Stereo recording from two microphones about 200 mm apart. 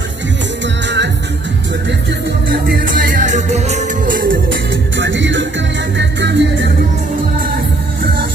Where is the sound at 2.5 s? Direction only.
50° right (ahead or behind).